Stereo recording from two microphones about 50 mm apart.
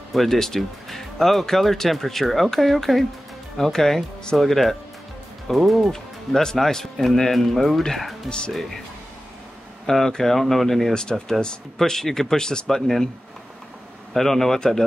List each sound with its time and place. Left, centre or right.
0.1 s speech: centre
5.9 s speech: centre
8.3 s speech: centre
9.8 s speech: centre
14.1 s speech: centre